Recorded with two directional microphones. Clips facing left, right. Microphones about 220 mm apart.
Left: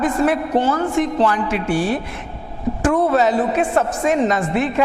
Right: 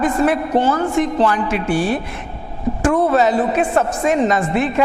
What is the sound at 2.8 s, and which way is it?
A woman's voice, 20° right (ahead or behind).